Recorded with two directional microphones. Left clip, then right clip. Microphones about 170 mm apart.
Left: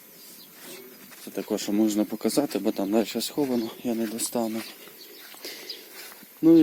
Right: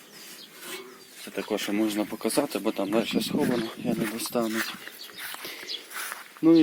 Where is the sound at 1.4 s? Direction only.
30° left (ahead or behind).